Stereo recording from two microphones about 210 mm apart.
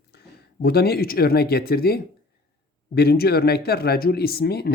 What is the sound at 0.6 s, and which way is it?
Speech, 50° left (ahead or behind).